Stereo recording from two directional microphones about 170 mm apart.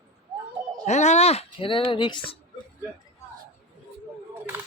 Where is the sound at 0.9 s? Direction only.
40° left (ahead or behind).